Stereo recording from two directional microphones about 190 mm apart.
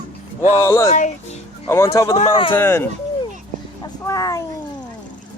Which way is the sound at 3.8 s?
15° left (ahead or behind).